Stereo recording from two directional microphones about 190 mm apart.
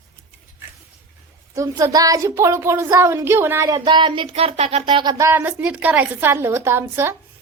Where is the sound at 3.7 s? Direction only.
25° right (ahead or behind).